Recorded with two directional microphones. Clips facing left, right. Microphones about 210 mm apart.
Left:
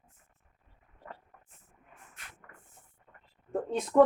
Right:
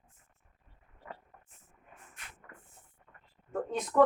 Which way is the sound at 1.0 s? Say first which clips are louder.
Even; 10° right (ahead or behind).